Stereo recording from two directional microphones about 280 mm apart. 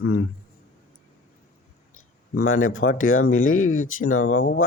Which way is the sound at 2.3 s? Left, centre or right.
Left.